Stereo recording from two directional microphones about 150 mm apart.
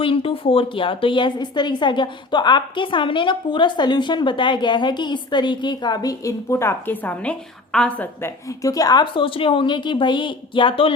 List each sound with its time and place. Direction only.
0.0 s a woman's voice: 35° left (ahead or behind)